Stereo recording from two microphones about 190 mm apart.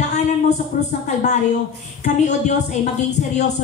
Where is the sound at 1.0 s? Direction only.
40° left (ahead or behind).